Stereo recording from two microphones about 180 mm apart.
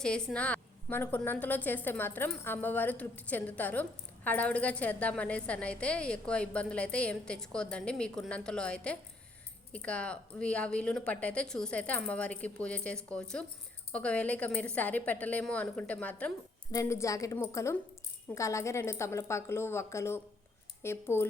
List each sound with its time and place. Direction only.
0.0 s a woman's voice: 5° left (ahead or behind)